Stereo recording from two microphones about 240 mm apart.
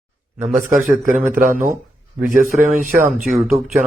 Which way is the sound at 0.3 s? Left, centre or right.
Right.